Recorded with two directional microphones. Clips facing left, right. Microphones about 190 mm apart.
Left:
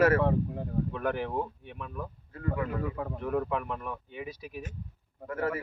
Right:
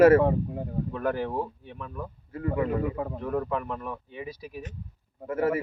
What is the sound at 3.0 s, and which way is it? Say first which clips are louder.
Speech: right 3 dB; 15° right (ahead or behind).